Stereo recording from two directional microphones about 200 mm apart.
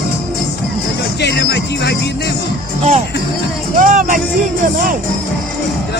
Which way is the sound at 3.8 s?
40° right (ahead or behind).